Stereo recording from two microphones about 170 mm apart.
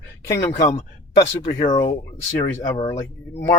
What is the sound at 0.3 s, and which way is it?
Speech, 15° left (ahead or behind).